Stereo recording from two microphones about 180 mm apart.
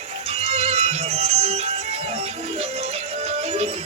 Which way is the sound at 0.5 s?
35° right (ahead or behind).